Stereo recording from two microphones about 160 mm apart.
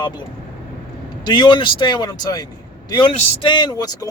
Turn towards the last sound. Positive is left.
turn(degrees=25)  # may be behind; listen again after turning